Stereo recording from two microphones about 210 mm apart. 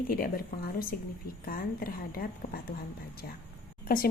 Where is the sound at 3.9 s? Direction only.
45° left (ahead or behind).